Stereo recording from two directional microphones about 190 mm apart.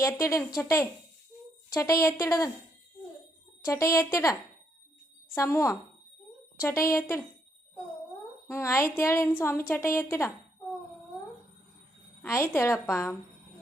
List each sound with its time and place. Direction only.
0.0 s a woman's voice: 15° left (ahead or behind)
3.7 s a woman's voice: 15° left (ahead or behind)
8.4 s a woman's voice: 15° left (ahead or behind)
12.2 s a woman's voice: 15° left (ahead or behind)